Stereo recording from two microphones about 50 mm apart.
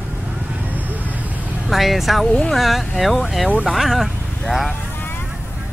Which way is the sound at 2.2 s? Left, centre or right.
Left.